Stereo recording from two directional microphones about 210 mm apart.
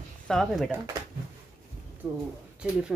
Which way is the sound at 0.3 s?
Centre (ahead or behind).